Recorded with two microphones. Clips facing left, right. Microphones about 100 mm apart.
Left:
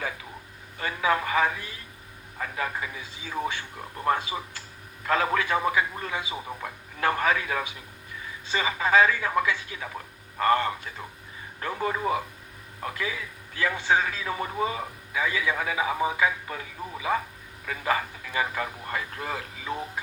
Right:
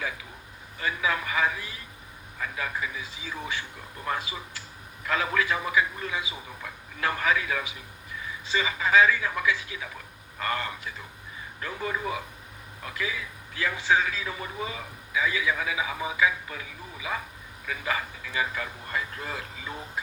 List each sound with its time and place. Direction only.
0.8 s a man's voice: 40° left (ahead or behind)